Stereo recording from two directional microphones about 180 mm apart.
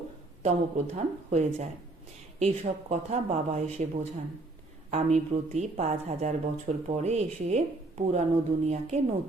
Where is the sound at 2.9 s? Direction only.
40° right (ahead or behind).